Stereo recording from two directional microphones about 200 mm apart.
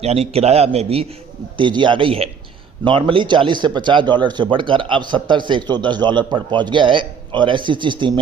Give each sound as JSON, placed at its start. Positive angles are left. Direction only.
{"t": 0.0, "sound": "a man's voice", "side_deg": -30}